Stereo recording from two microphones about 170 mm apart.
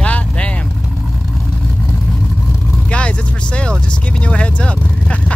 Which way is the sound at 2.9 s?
5° left (ahead or behind).